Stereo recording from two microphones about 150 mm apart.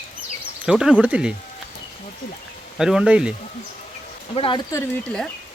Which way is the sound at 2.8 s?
5° right (ahead or behind).